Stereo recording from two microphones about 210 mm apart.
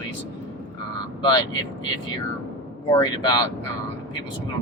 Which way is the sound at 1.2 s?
20° left (ahead or behind).